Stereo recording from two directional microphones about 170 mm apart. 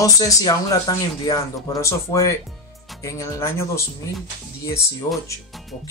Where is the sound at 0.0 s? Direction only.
20° left (ahead or behind).